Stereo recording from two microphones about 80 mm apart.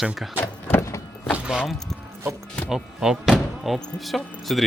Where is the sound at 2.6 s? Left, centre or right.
Centre.